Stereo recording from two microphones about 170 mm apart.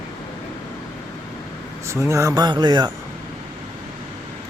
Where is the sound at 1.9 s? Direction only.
15° right (ahead or behind).